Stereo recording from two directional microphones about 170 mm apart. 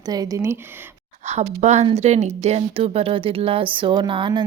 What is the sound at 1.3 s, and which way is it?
Speech, 40° right (ahead or behind).